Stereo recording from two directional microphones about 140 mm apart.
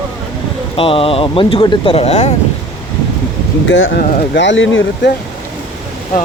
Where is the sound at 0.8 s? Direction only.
40° left (ahead or behind).